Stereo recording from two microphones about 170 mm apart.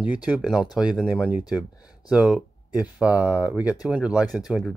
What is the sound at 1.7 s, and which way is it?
Speech, 20° left (ahead or behind).